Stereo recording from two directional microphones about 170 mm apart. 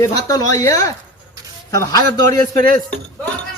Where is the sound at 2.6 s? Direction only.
55° right (ahead or behind).